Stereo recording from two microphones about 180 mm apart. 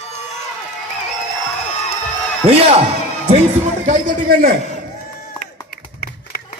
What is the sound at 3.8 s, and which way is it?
Speech, 50° right (ahead or behind).